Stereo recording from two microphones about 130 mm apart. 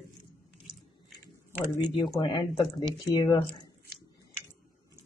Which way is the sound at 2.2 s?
35° left (ahead or behind).